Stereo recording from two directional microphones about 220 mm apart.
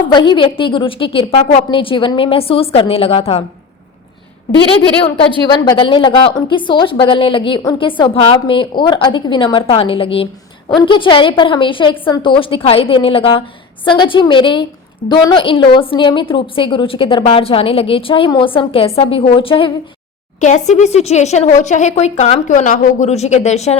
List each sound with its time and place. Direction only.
0.1 s a woman's voice: 20° left (ahead or behind)
5.5 s a woman's voice: 20° left (ahead or behind)